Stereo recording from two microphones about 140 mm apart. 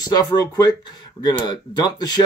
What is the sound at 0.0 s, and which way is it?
Speech, 30° left (ahead or behind).